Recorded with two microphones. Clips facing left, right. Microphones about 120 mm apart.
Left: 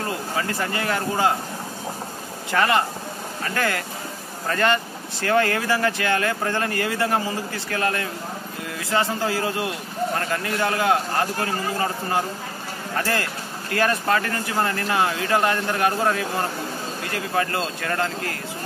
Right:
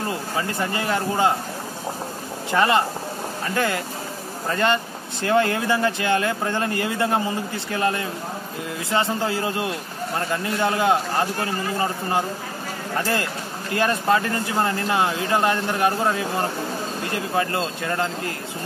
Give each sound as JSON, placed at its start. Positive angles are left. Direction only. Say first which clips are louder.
{"t": 0.1, "sound": "a man's voice", "louder": "even", "side_deg": -25}
{"t": 2.5, "sound": "speech", "louder": "right 1 dB", "side_deg": -20}